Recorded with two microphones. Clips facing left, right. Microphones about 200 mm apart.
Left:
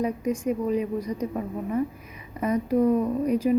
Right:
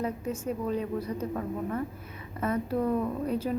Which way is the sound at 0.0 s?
15° left (ahead or behind).